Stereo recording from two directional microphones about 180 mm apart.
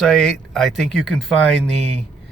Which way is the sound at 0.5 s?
Centre (ahead or behind).